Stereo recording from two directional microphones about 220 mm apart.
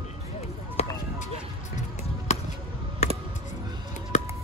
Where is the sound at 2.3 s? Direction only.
30° left (ahead or behind).